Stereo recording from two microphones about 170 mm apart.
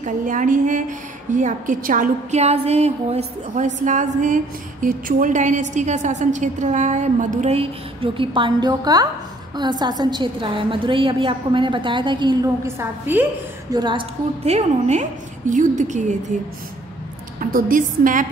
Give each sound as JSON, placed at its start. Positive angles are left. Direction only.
{"t": 0.0, "sound": "a woman's voice", "side_deg": -50}
{"t": 12.6, "sound": "a woman's voice", "side_deg": -15}
{"t": 13.7, "sound": "a woman's voice", "side_deg": -30}
{"t": 17.4, "sound": "a woman's voice", "side_deg": -55}